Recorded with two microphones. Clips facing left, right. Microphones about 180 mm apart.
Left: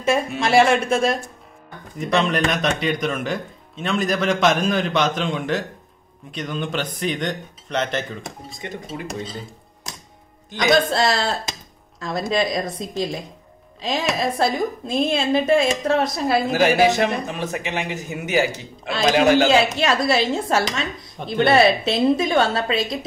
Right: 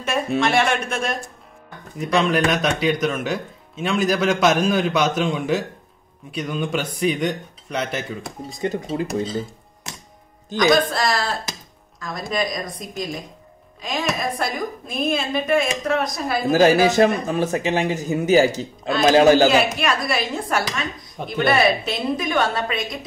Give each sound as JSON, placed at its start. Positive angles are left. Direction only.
{"t": 0.1, "sound": "a woman's voice", "side_deg": 30}
{"t": 2.0, "sound": "speech", "side_deg": 0}
{"t": 8.5, "sound": "a man's voice", "side_deg": -40}
{"t": 10.9, "sound": "a woman's voice", "side_deg": 25}
{"t": 16.9, "sound": "a man's voice", "side_deg": -35}
{"t": 19.6, "sound": "a woman's voice", "side_deg": 25}